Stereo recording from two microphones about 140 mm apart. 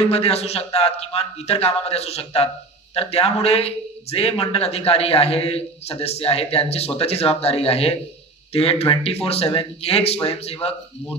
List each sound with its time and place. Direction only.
0.0 s a man's voice: 45° left (ahead or behind)